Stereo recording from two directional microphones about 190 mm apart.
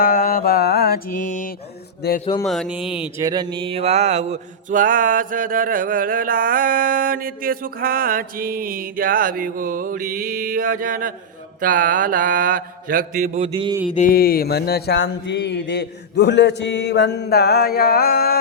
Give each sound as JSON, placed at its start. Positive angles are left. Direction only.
{"t": 0.0, "sound": "mantra", "side_deg": 50}
{"t": 2.0, "sound": "speech", "side_deg": 55}
{"t": 2.4, "sound": "speech", "side_deg": 0}
{"t": 3.2, "sound": "mantra", "side_deg": -20}
{"t": 13.9, "sound": "mantra", "side_deg": 45}